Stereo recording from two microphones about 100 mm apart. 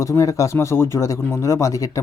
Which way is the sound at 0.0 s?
30° left (ahead or behind).